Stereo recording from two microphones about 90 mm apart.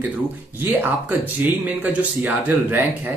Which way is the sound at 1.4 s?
15° right (ahead or behind).